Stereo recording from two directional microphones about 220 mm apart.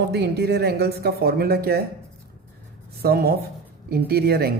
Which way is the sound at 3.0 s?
45° right (ahead or behind).